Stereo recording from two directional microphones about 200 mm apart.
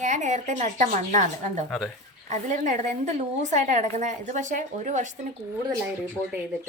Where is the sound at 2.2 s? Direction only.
40° right (ahead or behind).